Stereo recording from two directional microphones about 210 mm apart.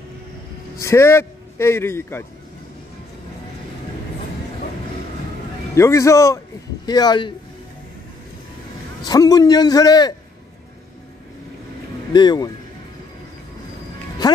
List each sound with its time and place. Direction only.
0.7 s speech: 15° left (ahead or behind)
5.8 s a man's voice: 15° left (ahead or behind)
9.0 s a man's voice: 20° left (ahead or behind)
12.1 s speech: 20° left (ahead or behind)